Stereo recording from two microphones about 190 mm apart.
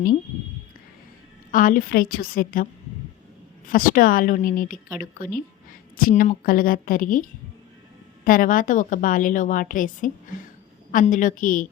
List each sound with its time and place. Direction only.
1.5 s a woman's voice: 45° left (ahead or behind)
3.7 s a woman's voice: 50° left (ahead or behind)
6.0 s a woman's voice: 45° left (ahead or behind)